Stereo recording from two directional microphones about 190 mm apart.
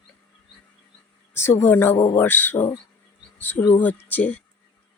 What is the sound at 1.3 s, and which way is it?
Speech, 15° left (ahead or behind).